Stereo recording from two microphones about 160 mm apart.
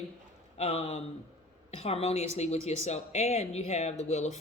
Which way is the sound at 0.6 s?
40° left (ahead or behind).